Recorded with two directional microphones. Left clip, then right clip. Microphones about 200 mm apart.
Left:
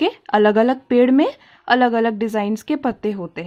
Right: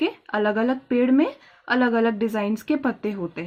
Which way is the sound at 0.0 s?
50° left (ahead or behind).